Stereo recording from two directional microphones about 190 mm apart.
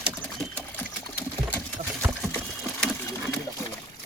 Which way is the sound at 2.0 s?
10° right (ahead or behind).